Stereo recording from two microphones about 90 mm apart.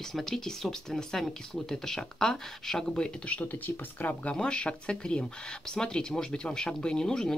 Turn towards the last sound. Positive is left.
turn(degrees=5)  # may be behind; listen again after turning